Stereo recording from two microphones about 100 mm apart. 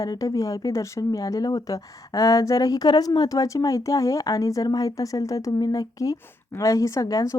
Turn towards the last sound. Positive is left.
turn(degrees=35)  # may be behind; listen again after turning